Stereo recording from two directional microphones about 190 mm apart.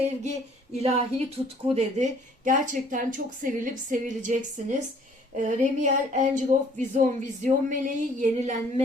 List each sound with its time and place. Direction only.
0.2 s speech: 35° right (ahead or behind)